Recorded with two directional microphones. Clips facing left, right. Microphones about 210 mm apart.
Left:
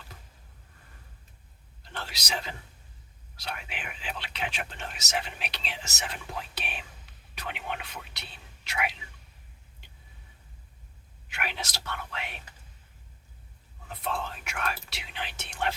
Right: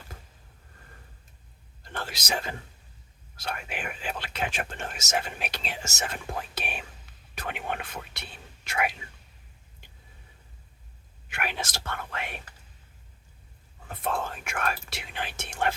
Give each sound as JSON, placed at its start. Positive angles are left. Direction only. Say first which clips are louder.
{"t": 1.8, "sound": "whispering", "louder": "right 4 dB", "side_deg": -50}
{"t": 3.3, "sound": "speech", "louder": "right 4 dB", "side_deg": -50}
{"t": 11.3, "sound": "speech", "louder": "right 3 dB", "side_deg": -50}
{"t": 13.8, "sound": "speech", "louder": "right 3 dB", "side_deg": -50}